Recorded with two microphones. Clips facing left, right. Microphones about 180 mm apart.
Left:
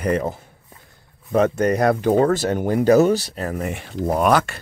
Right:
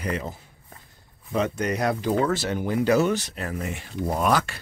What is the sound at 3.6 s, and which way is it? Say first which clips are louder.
Speech: left 5 dB; 60° left (ahead or behind).